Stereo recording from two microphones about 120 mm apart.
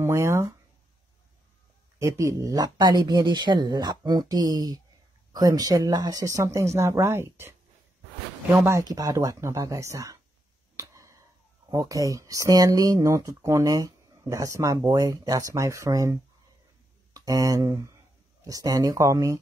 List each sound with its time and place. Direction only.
0.0 s speech: 20° right (ahead or behind)
2.0 s speech: 25° right (ahead or behind)
8.6 s speech: 30° right (ahead or behind)
10.8 s finger snapping: 25° right (ahead or behind)
11.7 s speech: 30° right (ahead or behind)